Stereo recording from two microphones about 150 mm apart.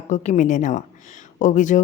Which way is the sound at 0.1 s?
55° left (ahead or behind).